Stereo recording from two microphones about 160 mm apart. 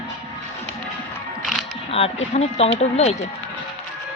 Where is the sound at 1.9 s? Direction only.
40° left (ahead or behind).